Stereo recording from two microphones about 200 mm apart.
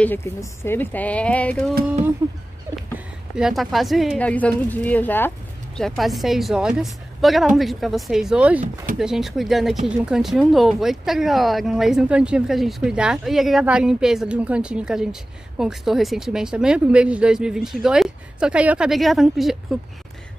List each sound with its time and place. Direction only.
0.0 s speech: 10° left (ahead or behind)
2.7 s a sound: 15° right (ahead or behind)
3.3 s speech: centre (ahead or behind)